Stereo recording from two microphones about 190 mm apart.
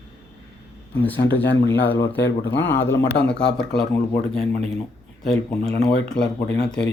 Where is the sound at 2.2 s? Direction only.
65° left (ahead or behind).